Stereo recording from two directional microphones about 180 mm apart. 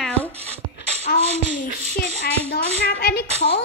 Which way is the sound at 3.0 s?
65° left (ahead or behind).